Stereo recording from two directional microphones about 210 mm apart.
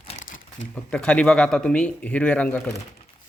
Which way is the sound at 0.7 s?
5° left (ahead or behind).